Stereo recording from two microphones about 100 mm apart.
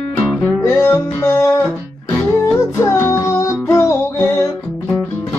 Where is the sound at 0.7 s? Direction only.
25° left (ahead or behind).